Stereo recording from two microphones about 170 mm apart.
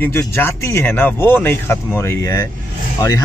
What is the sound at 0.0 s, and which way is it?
A man's voice, 15° left (ahead or behind).